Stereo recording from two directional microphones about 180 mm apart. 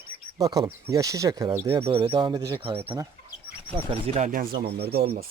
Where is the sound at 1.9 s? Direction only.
30° right (ahead or behind).